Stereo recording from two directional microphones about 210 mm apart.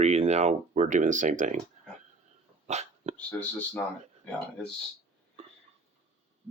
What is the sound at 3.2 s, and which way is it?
Speech, 5° left (ahead or behind).